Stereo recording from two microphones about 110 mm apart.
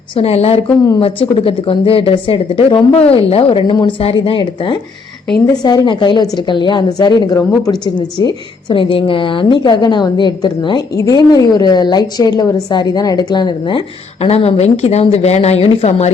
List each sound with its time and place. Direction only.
0.2 s a woman's voice: 65° left (ahead or behind); by 8.4 s 35° left (ahead or behind)
8.7 s a woman's voice: 55° left (ahead or behind)
14.3 s speech: 70° left (ahead or behind)